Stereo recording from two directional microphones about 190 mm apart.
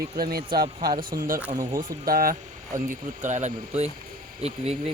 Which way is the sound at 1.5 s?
20° right (ahead or behind).